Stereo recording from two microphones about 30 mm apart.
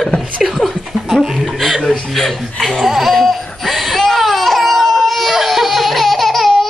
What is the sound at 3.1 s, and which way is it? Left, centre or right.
Laughter, centre.